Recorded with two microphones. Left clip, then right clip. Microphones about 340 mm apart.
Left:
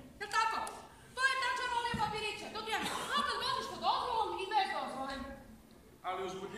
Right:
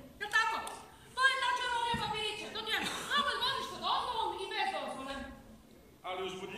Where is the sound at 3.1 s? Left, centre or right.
Centre.